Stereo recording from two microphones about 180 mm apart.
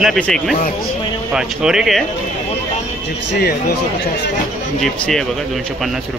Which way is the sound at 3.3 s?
65° left (ahead or behind).